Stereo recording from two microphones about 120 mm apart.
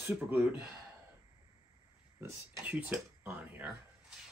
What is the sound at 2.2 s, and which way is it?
Speech, 15° right (ahead or behind).